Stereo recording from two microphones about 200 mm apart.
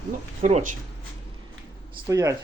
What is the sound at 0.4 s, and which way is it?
Speech, 40° right (ahead or behind).